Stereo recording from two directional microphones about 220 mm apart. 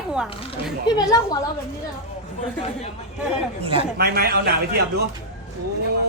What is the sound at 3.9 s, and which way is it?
Speech, 45° right (ahead or behind).